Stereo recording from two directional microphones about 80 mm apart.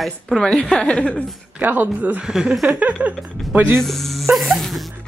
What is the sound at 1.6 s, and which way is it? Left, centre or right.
Speech, right.